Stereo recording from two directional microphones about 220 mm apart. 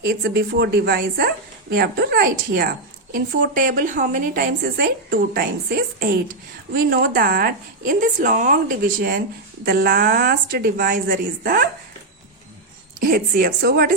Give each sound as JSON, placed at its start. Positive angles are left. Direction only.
{"t": 0.0, "sound": "a woman's voice", "side_deg": -45}
{"t": 13.0, "sound": "a woman's voice", "side_deg": -40}